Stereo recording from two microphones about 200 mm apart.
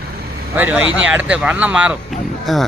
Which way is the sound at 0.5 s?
10° right (ahead or behind).